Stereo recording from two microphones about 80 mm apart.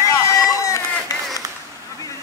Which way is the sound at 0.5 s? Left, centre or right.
Left.